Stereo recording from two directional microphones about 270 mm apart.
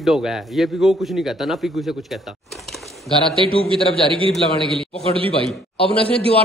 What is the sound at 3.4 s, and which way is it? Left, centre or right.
A man's voice, centre.